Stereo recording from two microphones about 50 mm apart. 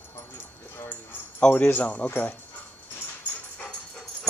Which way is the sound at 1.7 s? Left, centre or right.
Left.